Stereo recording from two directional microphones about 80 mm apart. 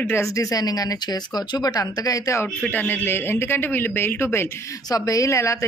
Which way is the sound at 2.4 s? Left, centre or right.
Centre.